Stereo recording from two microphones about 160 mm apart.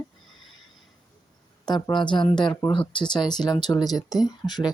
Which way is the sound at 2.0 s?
30° left (ahead or behind).